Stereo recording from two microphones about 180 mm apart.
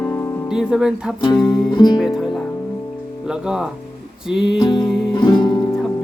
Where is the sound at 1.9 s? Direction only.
Centre (ahead or behind).